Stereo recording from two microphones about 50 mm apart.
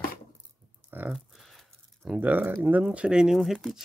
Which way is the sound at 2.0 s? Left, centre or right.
Centre.